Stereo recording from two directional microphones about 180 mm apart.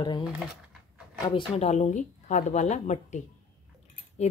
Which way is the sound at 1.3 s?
35° left (ahead or behind).